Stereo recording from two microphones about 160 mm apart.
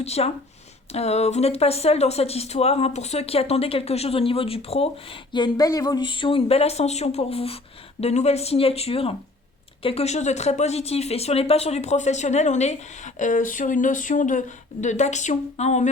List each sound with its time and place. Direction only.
0.0 s speech: 40° left (ahead or behind)
5.3 s speech: 25° left (ahead or behind); by 15.9 s 45° left (ahead or behind)